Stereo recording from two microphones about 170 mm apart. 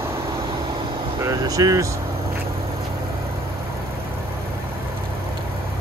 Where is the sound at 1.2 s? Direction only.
20° right (ahead or behind).